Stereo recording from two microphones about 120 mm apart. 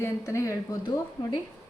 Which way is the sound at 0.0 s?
25° left (ahead or behind).